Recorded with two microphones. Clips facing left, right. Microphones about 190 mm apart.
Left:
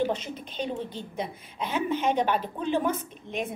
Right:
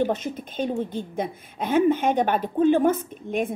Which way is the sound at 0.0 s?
50° right (ahead or behind).